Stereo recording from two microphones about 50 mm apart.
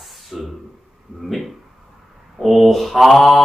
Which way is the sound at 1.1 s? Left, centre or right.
Centre.